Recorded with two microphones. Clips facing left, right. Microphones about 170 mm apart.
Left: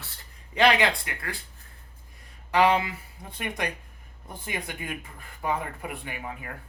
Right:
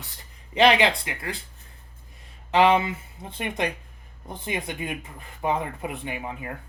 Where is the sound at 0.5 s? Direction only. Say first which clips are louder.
Right 3 dB; 20° right (ahead or behind).